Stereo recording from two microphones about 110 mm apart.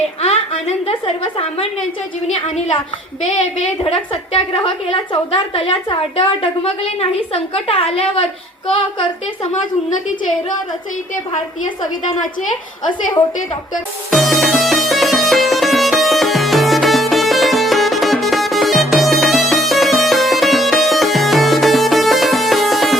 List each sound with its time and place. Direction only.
0.2 s a woman's voice: 70° left (ahead or behind); by 2.8 s 50° left (ahead or behind)
3.8 s a woman's voice: 60° left (ahead or behind)
14.1 s music: centre (ahead or behind)